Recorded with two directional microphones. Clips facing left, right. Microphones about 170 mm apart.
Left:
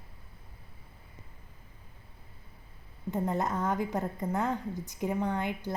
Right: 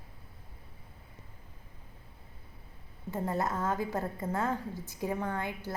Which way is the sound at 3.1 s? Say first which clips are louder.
Left 2 dB; 20° left (ahead or behind).